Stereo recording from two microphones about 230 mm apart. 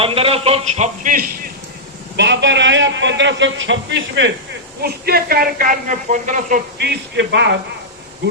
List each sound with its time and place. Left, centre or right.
0.0 s a man's voice: right
2.1 s a man's voice: right
4.8 s a woman's voice: right
6.7 s a man's voice: right